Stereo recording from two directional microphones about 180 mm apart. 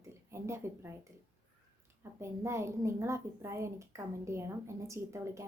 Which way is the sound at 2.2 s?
15° right (ahead or behind).